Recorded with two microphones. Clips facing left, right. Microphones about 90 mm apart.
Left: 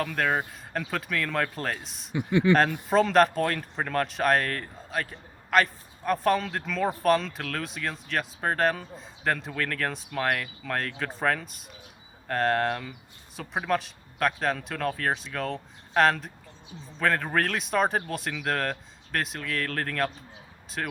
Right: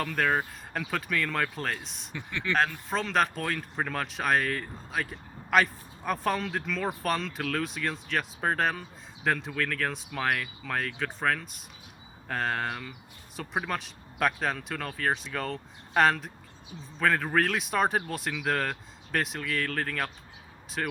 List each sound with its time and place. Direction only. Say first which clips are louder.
0.2 s speech: right 1 dB; centre (ahead or behind)
2.1 s speech: left 10 dB; 15° left (ahead or behind)
2.9 s speech: left 10 dB; centre (ahead or behind)